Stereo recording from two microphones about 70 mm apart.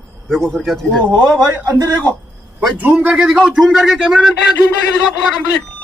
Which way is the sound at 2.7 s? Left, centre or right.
Right.